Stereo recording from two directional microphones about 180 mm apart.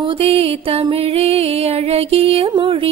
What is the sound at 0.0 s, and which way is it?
Music, 30° right (ahead or behind).